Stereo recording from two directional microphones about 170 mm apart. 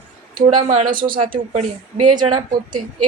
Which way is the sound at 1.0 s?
55° right (ahead or behind).